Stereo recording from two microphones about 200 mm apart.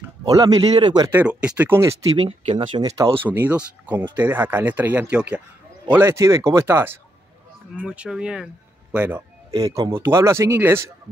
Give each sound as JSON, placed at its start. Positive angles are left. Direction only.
{"t": 0.2, "sound": "speech", "side_deg": -20}
{"t": 1.2, "sound": "a man's voice", "side_deg": -5}
{"t": 2.2, "sound": "speech", "side_deg": -30}
{"t": 3.3, "sound": "a man's voice", "side_deg": -5}